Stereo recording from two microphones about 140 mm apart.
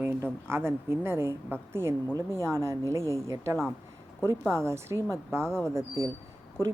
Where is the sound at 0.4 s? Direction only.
15° right (ahead or behind).